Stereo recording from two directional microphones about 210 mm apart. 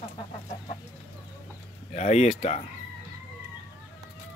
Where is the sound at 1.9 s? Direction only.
35° left (ahead or behind).